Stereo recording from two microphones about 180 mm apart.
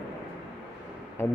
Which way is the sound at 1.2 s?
10° left (ahead or behind).